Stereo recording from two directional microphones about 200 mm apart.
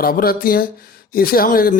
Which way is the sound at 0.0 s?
50° left (ahead or behind).